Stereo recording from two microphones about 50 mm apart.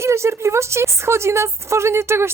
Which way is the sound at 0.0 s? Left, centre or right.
Right.